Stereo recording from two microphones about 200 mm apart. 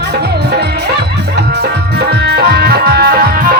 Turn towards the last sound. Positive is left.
turn(degrees=-50)  # may be behind; listen again after turning